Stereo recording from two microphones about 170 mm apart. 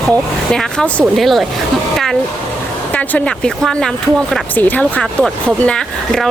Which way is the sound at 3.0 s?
5° left (ahead or behind).